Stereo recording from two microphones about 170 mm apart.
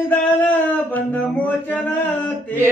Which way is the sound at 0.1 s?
10° left (ahead or behind).